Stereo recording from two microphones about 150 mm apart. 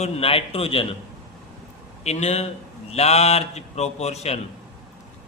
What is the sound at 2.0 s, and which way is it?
A man's voice, 45° left (ahead or behind).